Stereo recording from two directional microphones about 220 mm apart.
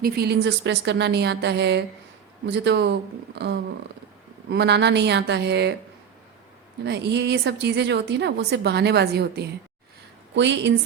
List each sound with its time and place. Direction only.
0.0 s a woman's voice: 45° right (ahead or behind)
6.8 s a woman's voice: 50° right (ahead or behind)